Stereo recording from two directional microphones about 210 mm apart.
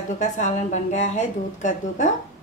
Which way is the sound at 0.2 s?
35° left (ahead or behind).